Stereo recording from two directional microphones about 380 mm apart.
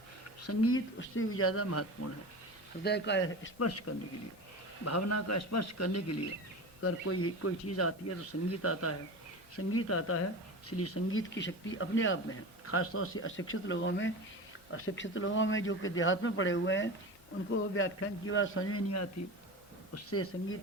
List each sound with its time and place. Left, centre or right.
0.4 s a man's voice: left
2.8 s a man's voice: left